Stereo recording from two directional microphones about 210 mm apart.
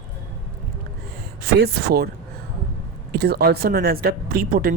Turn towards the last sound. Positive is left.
turn(degrees=-45)  # may be behind; listen again after turning